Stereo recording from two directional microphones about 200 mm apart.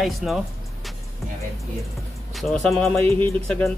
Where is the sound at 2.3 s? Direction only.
Centre (ahead or behind).